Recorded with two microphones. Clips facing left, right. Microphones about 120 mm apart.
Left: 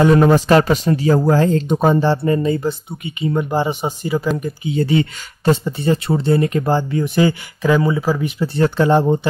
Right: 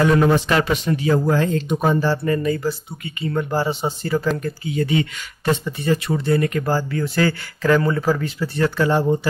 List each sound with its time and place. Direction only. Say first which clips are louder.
0.0 s speech: left 4 dB; 35° left (ahead or behind); by 4.7 s 15° left (ahead or behind)
4.7 s speech: left 4 dB; 30° left (ahead or behind); by 8.3 s 10° left (ahead or behind)
8.4 s speech: left 4 dB; 25° left (ahead or behind)